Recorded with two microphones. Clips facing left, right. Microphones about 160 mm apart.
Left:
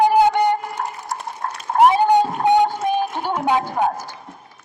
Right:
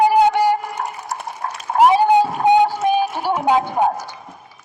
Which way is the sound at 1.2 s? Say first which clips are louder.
Right 1 dB; 10° right (ahead or behind).